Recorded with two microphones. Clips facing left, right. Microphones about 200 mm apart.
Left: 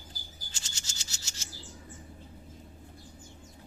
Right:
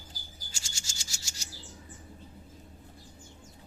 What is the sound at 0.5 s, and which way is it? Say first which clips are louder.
Rub: even; 10° right (ahead or behind).